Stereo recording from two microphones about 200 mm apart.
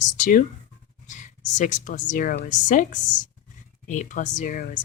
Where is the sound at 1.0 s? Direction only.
40° left (ahead or behind).